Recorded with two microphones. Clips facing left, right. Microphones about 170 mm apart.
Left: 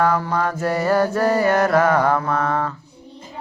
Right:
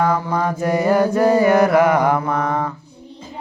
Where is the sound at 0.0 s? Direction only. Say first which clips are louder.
Right 1 dB; 15° right (ahead or behind).